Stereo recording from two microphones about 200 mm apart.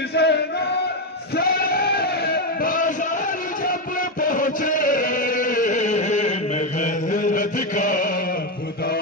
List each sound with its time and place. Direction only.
0.1 s chant: 55° left (ahead or behind)
1.3 s a sound: 50° left (ahead or behind)
4.2 s chant: 45° left (ahead or behind)
6.8 s mantra: 40° left (ahead or behind)